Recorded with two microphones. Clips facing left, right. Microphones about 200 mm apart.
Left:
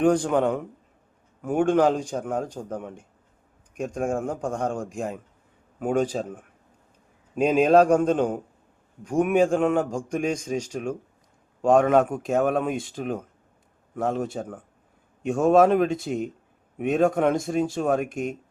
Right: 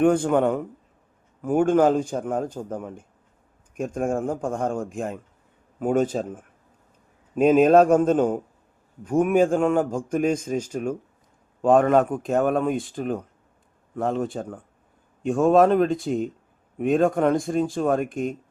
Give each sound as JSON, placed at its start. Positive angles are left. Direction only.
{"t": 0.0, "sound": "a man's voice", "side_deg": -5}